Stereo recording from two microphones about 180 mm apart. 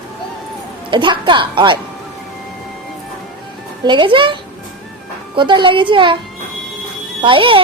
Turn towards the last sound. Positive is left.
turn(degrees=-30)  # may be behind; listen again after turning